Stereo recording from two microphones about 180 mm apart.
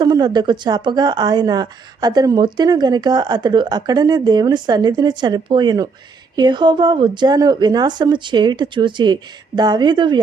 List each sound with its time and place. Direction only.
0.0 s a woman's voice: 25° right (ahead or behind)